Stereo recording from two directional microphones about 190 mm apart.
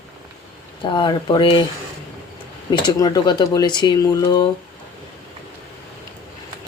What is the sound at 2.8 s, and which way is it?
Speech, 20° left (ahead or behind).